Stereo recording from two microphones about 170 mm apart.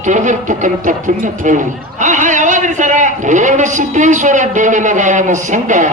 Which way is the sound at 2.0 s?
45° right (ahead or behind).